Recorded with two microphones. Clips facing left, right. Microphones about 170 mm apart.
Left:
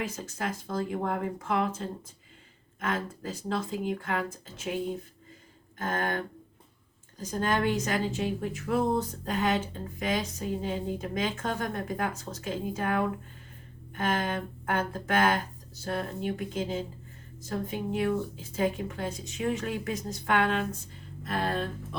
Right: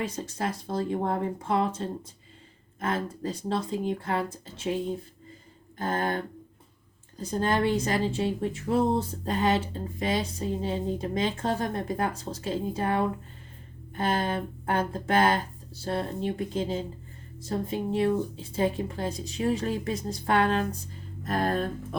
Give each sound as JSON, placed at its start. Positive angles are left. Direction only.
{"t": 0.0, "sound": "speech", "side_deg": -30}
{"t": 5.7, "sound": "a sound", "side_deg": -35}
{"t": 7.2, "sound": "speech", "side_deg": -30}
{"t": 21.2, "sound": "music", "side_deg": -45}